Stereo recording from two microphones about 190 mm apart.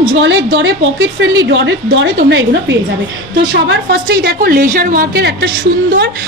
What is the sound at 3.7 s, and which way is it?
A woman's voice, 60° right (ahead or behind).